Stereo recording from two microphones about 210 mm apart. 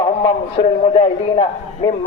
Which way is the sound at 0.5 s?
25° left (ahead or behind).